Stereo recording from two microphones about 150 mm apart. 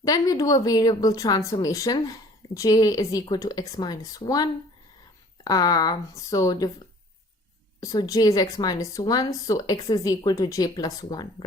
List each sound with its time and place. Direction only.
0.0 s speech: 25° left (ahead or behind)
7.8 s speech: 25° left (ahead or behind)